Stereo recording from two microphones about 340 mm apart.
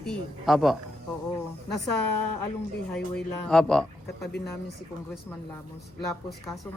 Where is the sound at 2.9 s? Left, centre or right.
Centre.